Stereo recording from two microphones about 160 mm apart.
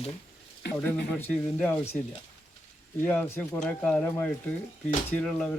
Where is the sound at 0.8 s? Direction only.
10° left (ahead or behind).